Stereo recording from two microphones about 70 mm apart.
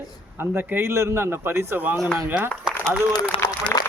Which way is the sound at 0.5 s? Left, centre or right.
Right.